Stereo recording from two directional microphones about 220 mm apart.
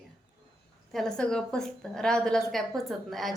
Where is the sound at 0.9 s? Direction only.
Centre (ahead or behind).